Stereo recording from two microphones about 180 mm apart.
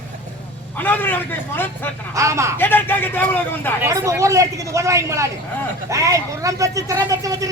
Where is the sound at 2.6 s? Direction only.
10° left (ahead or behind).